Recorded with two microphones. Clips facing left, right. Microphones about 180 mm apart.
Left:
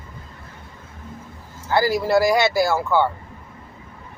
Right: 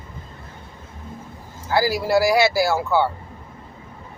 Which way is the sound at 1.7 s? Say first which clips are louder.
Left 1 dB; 10° right (ahead or behind).